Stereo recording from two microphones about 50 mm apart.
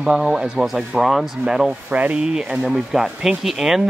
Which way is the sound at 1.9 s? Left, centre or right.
Right.